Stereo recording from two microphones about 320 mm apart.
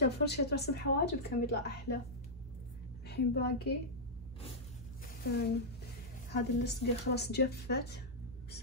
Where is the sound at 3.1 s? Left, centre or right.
Left.